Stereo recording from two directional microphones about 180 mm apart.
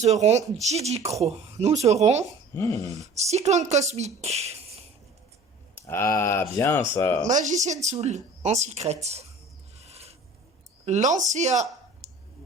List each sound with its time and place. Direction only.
0.0 s speech: 40° right (ahead or behind)
2.6 s speech: 15° left (ahead or behind)
2.9 s speech: 40° right (ahead or behind)
5.7 s a sound: 15° left (ahead or behind)
6.1 s speech: 15° left (ahead or behind)
7.3 s speech: 45° right (ahead or behind)
9.7 s a sound: 35° right (ahead or behind)
10.8 s speech: 40° right (ahead or behind)
12.0 s a sound: 35° right (ahead or behind)